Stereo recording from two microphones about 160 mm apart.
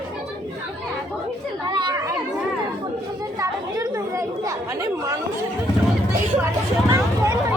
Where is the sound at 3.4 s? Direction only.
20° right (ahead or behind).